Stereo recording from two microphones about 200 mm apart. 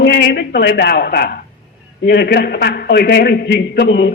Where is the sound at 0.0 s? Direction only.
55° left (ahead or behind).